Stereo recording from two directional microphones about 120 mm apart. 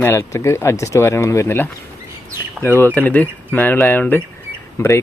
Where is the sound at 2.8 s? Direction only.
15° left (ahead or behind).